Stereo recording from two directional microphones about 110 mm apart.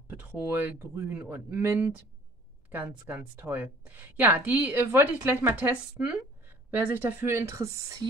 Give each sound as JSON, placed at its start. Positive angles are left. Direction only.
{"t": 0.2, "sound": "speech", "side_deg": -20}
{"t": 3.1, "sound": "a woman's voice", "side_deg": -15}